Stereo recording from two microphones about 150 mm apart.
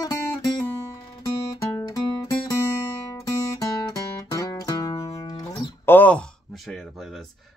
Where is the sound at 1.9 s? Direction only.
20° left (ahead or behind).